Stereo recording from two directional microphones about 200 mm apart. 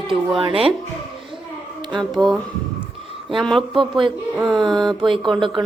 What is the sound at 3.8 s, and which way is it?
Mantra, 25° right (ahead or behind).